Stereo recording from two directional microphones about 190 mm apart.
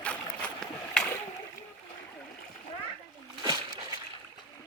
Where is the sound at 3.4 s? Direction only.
20° right (ahead or behind).